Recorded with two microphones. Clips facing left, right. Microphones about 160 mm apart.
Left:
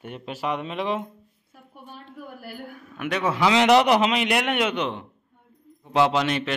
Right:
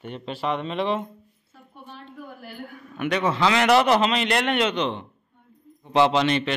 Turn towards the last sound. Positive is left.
turn(degrees=5)  # may be behind; listen again after turning